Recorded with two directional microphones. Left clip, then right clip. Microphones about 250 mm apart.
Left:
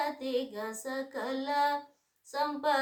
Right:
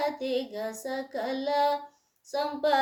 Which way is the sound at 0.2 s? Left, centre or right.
Centre.